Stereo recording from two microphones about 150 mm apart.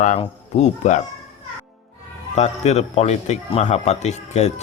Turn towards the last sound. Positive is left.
turn(degrees=45)  # may be behind; listen again after turning